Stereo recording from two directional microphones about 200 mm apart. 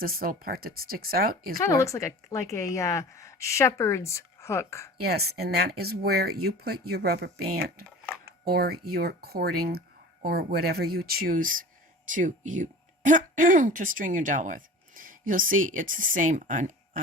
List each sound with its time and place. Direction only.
0.0 s speech: 45° right (ahead or behind)
1.6 s a woman's voice: 15° left (ahead or behind)
5.0 s speech: 50° right (ahead or behind)